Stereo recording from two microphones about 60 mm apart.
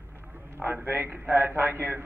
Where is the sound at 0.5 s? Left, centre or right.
Right.